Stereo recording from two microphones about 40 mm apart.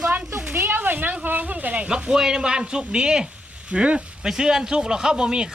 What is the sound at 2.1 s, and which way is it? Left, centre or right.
Speech, centre.